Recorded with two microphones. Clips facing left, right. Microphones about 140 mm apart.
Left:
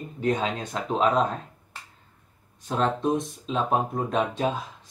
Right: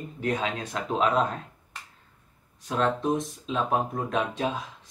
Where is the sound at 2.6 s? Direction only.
Centre (ahead or behind).